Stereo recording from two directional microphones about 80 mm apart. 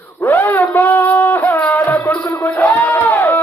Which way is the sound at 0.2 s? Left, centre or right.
Left.